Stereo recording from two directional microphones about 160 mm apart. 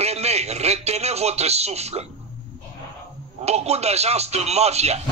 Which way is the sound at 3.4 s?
40° right (ahead or behind).